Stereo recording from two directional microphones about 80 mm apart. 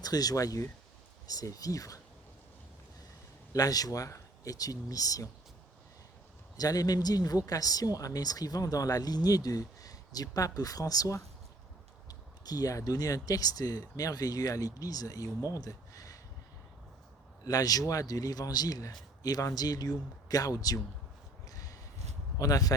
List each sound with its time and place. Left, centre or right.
0.0 s speech: left
3.5 s speech: left
6.6 s speech: left
15.5 s a sound: left
17.4 s speech: left
21.4 s a sound: left
22.4 s speech: left